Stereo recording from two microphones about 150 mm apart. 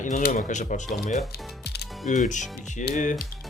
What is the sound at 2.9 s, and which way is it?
Speech, 55° left (ahead or behind).